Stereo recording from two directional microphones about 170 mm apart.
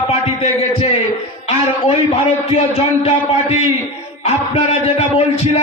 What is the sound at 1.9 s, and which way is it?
Speech, 35° left (ahead or behind).